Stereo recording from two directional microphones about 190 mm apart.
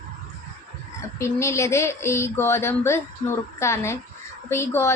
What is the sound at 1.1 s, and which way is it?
A woman's voice, 15° left (ahead or behind).